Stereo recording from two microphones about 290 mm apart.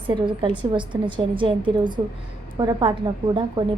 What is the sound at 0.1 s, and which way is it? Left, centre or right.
A woman's voice, centre.